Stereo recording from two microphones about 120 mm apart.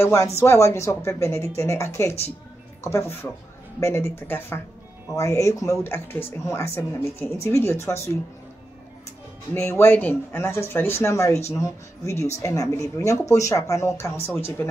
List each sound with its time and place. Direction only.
0.0 s speech: 25° left (ahead or behind)
9.5 s speech: 20° left (ahead or behind)